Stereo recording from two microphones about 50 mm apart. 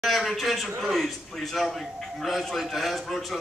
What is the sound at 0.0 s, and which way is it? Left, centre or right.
A man's voice, centre.